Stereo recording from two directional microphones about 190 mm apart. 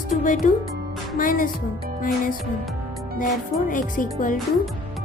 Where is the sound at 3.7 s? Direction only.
45° left (ahead or behind).